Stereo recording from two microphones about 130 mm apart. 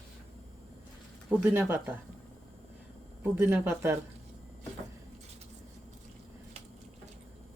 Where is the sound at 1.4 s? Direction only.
15° right (ahead or behind).